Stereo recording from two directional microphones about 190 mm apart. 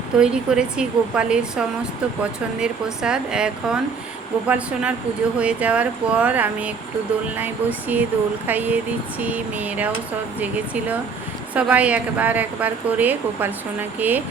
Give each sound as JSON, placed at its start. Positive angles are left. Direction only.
{"t": 0.2, "sound": "a woman's voice", "side_deg": -5}
{"t": 11.5, "sound": "a woman's voice", "side_deg": -5}